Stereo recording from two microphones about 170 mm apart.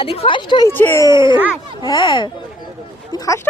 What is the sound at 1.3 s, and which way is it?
Speech, 10° right (ahead or behind).